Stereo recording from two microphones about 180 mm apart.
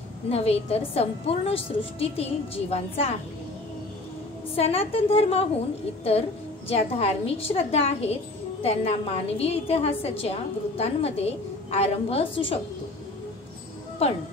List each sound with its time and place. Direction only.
0.3 s a woman's voice: 35° left (ahead or behind)
4.6 s a woman's voice: 35° left (ahead or behind)
6.7 s a woman's voice: 35° left (ahead or behind)
14.0 s a woman's voice: 35° left (ahead or behind)